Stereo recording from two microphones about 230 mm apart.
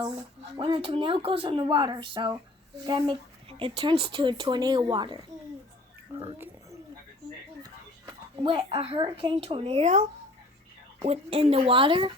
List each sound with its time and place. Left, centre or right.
0.5 s speech: right
6.1 s a sound: centre
7.6 s speech: centre